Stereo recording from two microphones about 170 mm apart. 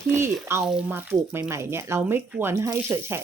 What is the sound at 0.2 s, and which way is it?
Speech, 15° right (ahead or behind).